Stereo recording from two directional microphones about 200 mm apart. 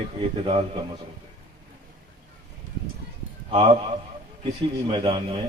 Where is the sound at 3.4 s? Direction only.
25° right (ahead or behind).